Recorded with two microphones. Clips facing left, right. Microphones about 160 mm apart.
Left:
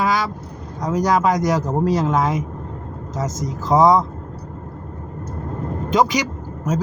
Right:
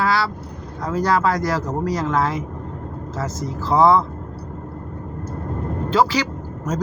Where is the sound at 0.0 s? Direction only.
15° left (ahead or behind).